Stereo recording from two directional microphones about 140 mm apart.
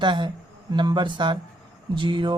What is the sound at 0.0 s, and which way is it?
Speech, 35° right (ahead or behind).